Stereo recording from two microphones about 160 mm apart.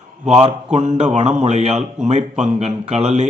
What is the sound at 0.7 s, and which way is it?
A man's voice, 45° right (ahead or behind).